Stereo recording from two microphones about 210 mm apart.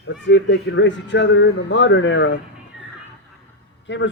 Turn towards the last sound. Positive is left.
turn(degrees=60)  # may be behind; listen again after turning